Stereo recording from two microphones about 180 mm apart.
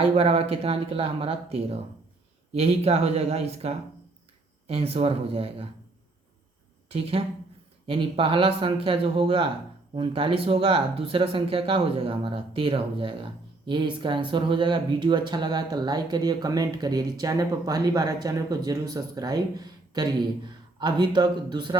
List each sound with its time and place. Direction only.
0.0 s speech: 35° right (ahead or behind)
6.9 s speech: 30° right (ahead or behind)